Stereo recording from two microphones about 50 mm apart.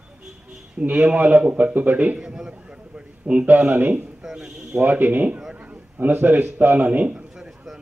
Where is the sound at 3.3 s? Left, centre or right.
Right.